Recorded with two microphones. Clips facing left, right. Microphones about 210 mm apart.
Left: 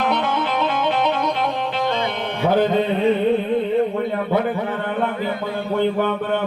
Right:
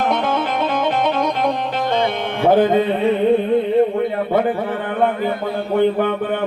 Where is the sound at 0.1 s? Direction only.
50° right (ahead or behind).